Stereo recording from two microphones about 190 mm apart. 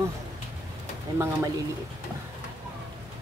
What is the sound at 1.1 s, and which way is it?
Speech, 15° right (ahead or behind).